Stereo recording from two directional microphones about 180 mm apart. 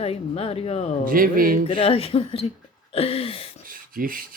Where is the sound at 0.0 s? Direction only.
35° left (ahead or behind).